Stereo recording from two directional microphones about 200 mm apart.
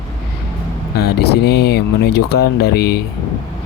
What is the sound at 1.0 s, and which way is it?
Speech, 55° left (ahead or behind).